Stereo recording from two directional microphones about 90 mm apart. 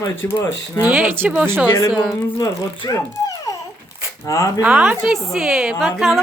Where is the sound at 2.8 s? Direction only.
45° left (ahead or behind).